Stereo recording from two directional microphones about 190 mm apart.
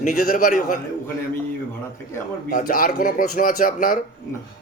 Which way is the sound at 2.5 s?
50° left (ahead or behind).